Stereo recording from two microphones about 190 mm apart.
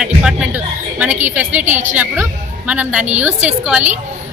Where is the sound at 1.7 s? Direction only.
40° right (ahead or behind).